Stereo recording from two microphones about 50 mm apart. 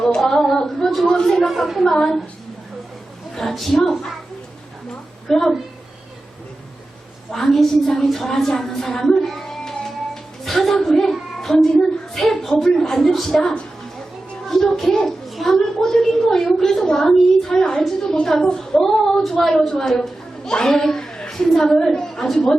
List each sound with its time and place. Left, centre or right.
0.2 s a sound: centre
1.5 s speech: centre
1.9 s a woman's voice: centre
3.3 s speech: centre
4.9 s a sound: centre
7.3 s a woman's voice: centre
8.3 s a child's voice: centre
15.0 s a sound: centre
16.6 s a woman's voice: centre